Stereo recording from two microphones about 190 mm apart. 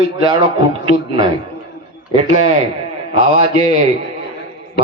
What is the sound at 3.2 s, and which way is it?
Speech, 25° right (ahead or behind).